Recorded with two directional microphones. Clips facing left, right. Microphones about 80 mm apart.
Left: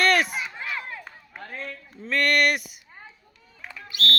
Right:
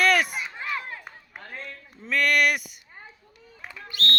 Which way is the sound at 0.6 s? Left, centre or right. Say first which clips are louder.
Right 1 dB; right.